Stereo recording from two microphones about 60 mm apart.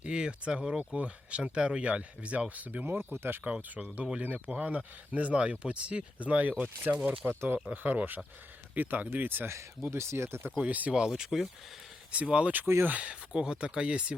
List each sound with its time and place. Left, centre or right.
0.0 s speech: centre; by 3.4 s right
3.4 s speech: right
9.5 s speech: right
10.6 s speech: right
11.1 s speech: centre
12.1 s speech: right